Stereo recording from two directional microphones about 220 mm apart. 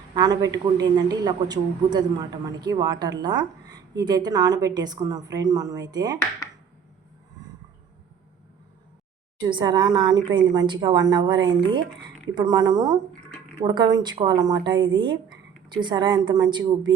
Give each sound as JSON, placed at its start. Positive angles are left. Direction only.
{"t": 0.1, "sound": "a man's voice", "side_deg": -20}
{"t": 9.5, "sound": "a woman's voice", "side_deg": -20}